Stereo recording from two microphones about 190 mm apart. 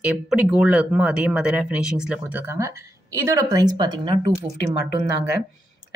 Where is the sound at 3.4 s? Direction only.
20° right (ahead or behind).